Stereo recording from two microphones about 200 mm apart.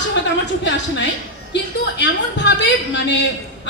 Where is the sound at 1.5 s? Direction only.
60° left (ahead or behind).